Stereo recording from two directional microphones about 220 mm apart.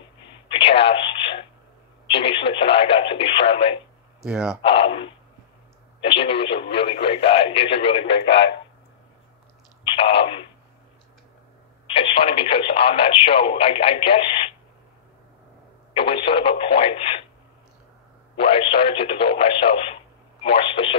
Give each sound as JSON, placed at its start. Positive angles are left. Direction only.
{"t": 0.6, "sound": "radio", "side_deg": 25}
{"t": 2.0, "sound": "speech", "side_deg": 25}
{"t": 4.2, "sound": "speech", "side_deg": -5}
{"t": 4.6, "sound": "speech", "side_deg": 25}
{"t": 8.3, "sound": "speech", "side_deg": 55}
{"t": 9.9, "sound": "speech", "side_deg": 25}
{"t": 11.9, "sound": "speech", "side_deg": 25}
{"t": 15.9, "sound": "speech", "side_deg": 25}
{"t": 18.3, "sound": "speech", "side_deg": 25}